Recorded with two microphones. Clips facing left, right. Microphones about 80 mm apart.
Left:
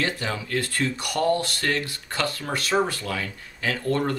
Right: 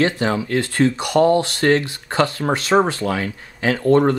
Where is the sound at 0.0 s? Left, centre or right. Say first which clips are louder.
Right 9 dB; right.